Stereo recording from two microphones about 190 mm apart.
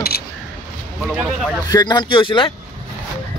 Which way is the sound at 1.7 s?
20° left (ahead or behind).